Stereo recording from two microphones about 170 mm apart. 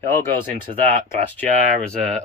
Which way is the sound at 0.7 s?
35° right (ahead or behind).